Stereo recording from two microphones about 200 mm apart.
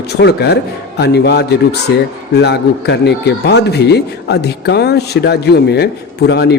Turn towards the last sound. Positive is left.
turn(degrees=55)  # may be behind; listen again after turning